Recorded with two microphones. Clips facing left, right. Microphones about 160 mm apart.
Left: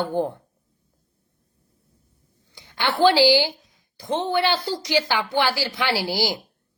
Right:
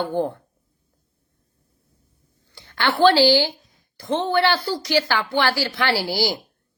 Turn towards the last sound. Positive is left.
turn(degrees=15)  # may be behind; listen again after turning